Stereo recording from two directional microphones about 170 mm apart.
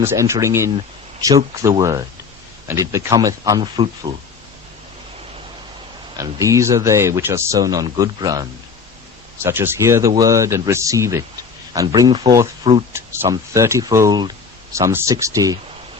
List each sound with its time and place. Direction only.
0.0 s speech: 15° right (ahead or behind)
6.1 s speech: 20° right (ahead or behind)